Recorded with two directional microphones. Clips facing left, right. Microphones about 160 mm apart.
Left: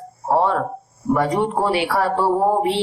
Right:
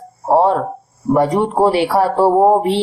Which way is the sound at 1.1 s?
35° right (ahead or behind).